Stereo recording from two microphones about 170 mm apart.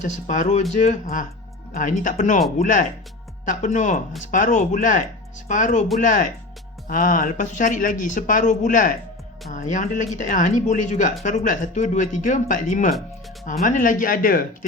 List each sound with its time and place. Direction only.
0.0 s speech: 45° left (ahead or behind)